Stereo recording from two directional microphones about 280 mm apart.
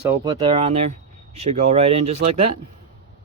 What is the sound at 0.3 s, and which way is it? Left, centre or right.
Speech, centre.